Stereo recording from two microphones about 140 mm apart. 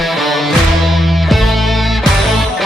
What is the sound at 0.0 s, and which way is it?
Music, centre (ahead or behind).